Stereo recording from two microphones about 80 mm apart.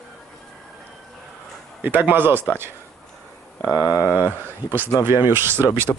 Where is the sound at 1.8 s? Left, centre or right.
Right.